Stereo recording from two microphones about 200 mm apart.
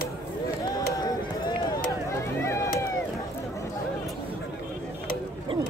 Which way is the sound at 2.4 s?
15° left (ahead or behind).